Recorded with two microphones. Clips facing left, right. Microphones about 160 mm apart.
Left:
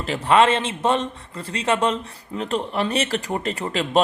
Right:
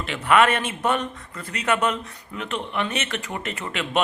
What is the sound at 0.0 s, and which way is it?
A man's voice, 35° left (ahead or behind).